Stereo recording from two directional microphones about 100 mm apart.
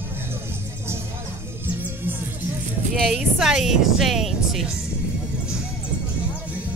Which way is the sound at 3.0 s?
5° right (ahead or behind).